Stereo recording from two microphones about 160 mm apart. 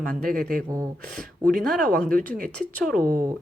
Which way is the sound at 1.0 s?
5° left (ahead or behind).